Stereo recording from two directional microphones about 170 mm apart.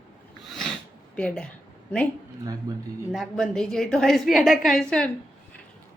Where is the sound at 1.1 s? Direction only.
5° left (ahead or behind).